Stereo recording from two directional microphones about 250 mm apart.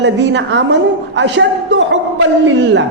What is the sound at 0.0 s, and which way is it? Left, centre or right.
A man's voice, right.